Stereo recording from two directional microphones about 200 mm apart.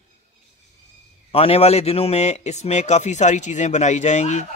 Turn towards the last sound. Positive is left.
turn(degrees=35)  # may be behind; listen again after turning